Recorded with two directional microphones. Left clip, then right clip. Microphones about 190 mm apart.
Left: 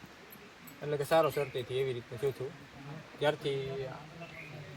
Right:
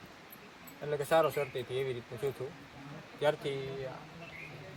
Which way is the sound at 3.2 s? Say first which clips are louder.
Even; 5° right (ahead or behind).